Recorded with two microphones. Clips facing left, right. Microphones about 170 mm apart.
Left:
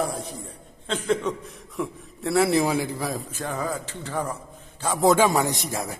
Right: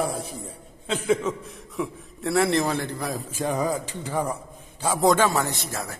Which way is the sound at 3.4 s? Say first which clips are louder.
Right 7 dB; 15° right (ahead or behind).